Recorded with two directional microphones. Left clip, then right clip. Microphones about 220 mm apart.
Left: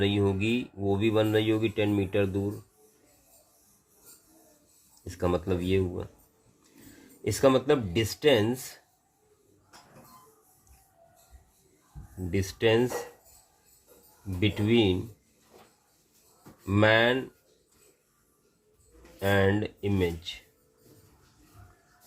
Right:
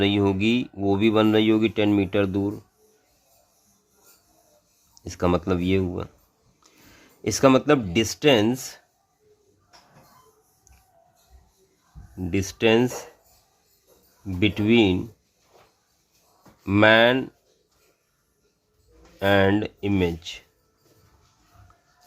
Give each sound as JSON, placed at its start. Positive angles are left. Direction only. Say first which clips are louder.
{"t": 0.0, "sound": "speech", "louder": "right 5 dB", "side_deg": -35}
{"t": 5.0, "sound": "speech", "louder": "right 5 dB", "side_deg": -35}
{"t": 7.3, "sound": "speech", "louder": "right 5 dB", "side_deg": -40}
{"t": 12.3, "sound": "speech", "louder": "right 5 dB", "side_deg": -40}
{"t": 14.3, "sound": "speech", "louder": "right 6 dB", "side_deg": -40}
{"t": 16.6, "sound": "speech", "louder": "right 6 dB", "side_deg": -40}
{"t": 19.2, "sound": "speech", "louder": "right 6 dB", "side_deg": -40}